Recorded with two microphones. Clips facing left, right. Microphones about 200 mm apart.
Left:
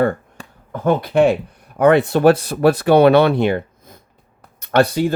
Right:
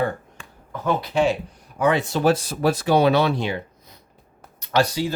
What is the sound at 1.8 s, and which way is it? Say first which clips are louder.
Speech: left 7 dB; 60° left (ahead or behind).